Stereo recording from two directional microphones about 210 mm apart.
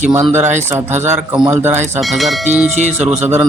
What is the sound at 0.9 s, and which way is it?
Speech, 35° right (ahead or behind).